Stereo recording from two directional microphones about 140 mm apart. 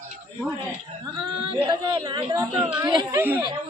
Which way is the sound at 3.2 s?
15° right (ahead or behind).